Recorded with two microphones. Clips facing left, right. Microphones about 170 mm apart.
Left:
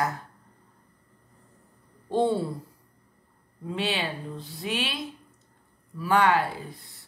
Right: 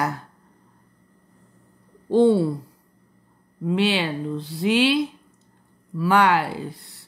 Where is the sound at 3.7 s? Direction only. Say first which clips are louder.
Right 8 dB; 80° right.